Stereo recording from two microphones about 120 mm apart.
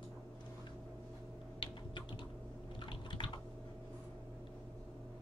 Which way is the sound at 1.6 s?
45° left (ahead or behind).